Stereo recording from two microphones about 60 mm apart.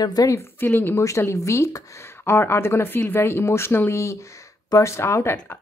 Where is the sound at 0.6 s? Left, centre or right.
Left.